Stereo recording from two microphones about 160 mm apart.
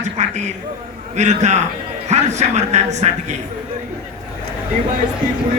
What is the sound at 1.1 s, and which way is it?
Speech, 45° right (ahead or behind).